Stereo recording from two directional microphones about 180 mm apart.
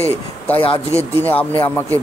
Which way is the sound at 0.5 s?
30° left (ahead or behind).